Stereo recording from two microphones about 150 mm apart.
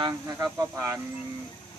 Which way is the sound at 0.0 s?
25° right (ahead or behind).